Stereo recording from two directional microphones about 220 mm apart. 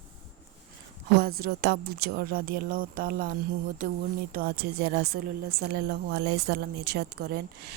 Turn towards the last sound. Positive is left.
turn(degrees=-45)  # may be behind; listen again after turning